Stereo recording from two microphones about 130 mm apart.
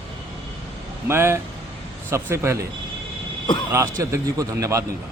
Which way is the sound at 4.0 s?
25° right (ahead or behind).